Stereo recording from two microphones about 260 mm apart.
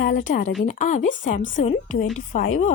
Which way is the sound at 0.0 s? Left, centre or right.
Left.